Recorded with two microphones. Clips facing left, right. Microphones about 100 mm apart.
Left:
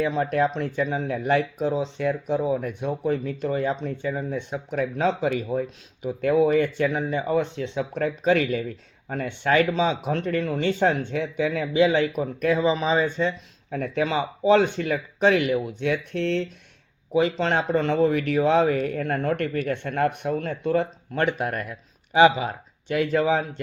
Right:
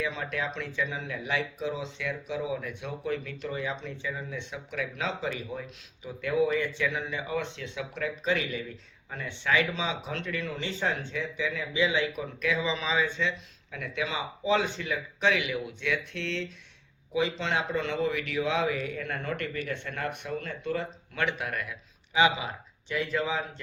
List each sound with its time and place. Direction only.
0.0 s speech: 50° left (ahead or behind)
22.9 s speech: 55° left (ahead or behind)